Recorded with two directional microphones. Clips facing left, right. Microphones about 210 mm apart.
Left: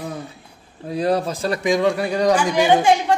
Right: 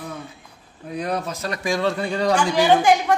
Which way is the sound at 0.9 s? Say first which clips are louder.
Left 6 dB; 30° left (ahead or behind).